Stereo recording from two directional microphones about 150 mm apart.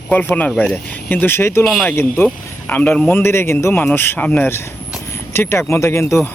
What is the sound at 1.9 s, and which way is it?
Speech, 15° left (ahead or behind).